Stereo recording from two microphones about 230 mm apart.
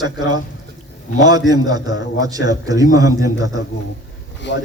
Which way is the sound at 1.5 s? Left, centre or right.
Centre.